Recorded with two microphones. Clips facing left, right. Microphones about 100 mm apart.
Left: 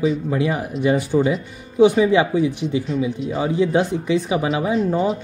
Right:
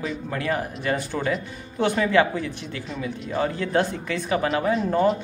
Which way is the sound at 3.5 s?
15° left (ahead or behind).